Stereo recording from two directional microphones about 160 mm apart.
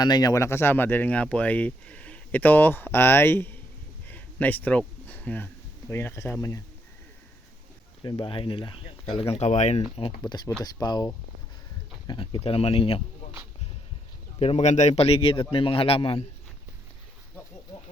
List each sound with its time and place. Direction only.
0.0 s speech: 25° left (ahead or behind)
4.1 s a sound: 10° left (ahead or behind)
5.9 s speech: 15° left (ahead or behind)
8.0 s speech: 30° left (ahead or behind)
10.2 s speech: 25° left (ahead or behind)
14.3 s speech: 40° left (ahead or behind)